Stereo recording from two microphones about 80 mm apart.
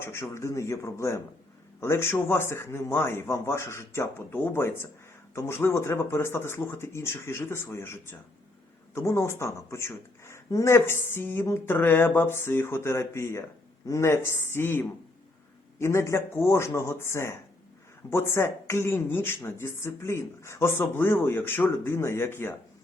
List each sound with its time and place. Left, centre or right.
0.0 s speech: left